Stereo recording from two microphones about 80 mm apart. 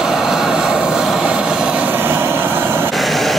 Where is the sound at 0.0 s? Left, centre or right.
Centre.